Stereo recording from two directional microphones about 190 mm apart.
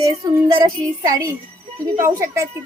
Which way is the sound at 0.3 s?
20° right (ahead or behind).